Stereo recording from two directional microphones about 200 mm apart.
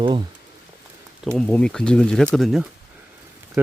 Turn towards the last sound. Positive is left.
turn(degrees=-10)  # may be behind; listen again after turning